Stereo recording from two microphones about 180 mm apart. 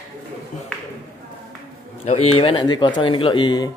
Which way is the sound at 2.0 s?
35° left (ahead or behind).